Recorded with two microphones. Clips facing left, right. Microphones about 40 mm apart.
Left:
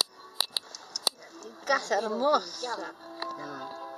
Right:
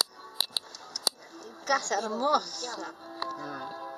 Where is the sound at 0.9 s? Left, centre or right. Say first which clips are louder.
Left 1 dB; centre.